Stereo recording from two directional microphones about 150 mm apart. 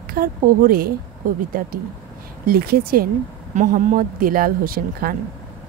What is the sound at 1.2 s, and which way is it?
Speech, 60° right (ahead or behind).